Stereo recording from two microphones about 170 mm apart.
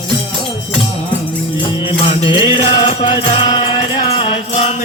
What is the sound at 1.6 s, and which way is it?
Music, 30° left (ahead or behind).